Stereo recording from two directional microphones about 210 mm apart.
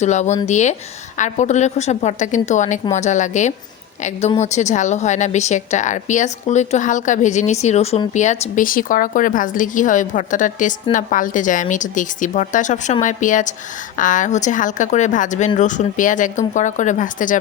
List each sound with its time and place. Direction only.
0.0 s a woman's voice: 35° left (ahead or behind)